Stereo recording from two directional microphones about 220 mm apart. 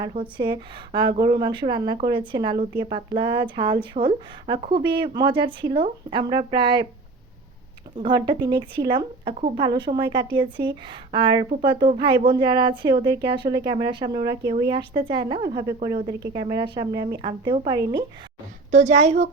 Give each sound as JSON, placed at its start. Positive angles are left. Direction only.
{"t": 0.0, "sound": "a woman's voice", "side_deg": -20}
{"t": 7.9, "sound": "a woman's voice", "side_deg": -20}
{"t": 18.7, "sound": "a woman's voice", "side_deg": -30}